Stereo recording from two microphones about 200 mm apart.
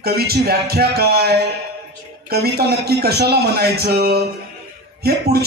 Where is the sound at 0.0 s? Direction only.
50° right (ahead or behind).